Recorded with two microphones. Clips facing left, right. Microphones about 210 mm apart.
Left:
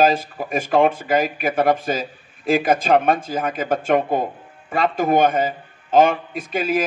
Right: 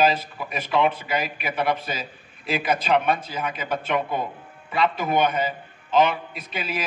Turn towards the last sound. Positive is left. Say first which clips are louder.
# left 9 dB
turn(degrees=50)  # may be behind; listen again after turning